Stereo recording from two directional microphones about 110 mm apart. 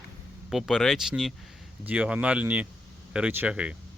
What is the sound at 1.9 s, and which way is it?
Speech, 15° right (ahead or behind).